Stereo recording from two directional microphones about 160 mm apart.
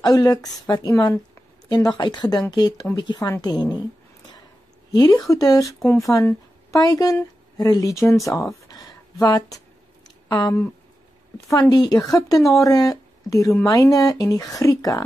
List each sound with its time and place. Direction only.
0.0 s speech: 25° left (ahead or behind)
4.9 s speech: 20° left (ahead or behind)
8.6 s a sound: 20° left (ahead or behind)
10.2 s speech: 25° left (ahead or behind)
11.7 s speech: 25° left (ahead or behind)